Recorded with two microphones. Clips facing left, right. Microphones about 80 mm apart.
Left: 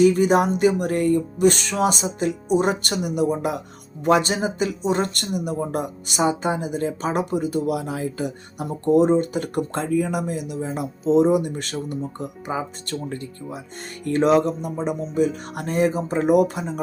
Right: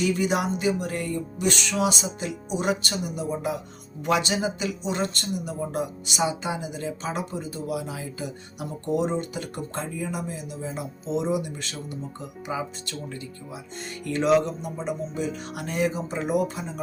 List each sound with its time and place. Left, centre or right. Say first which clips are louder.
0.0 s speech: left 8 dB; left
0.5 s speech: left 7 dB; left
2.8 s speech: left 8 dB; left
4.0 s speech: left 5 dB; left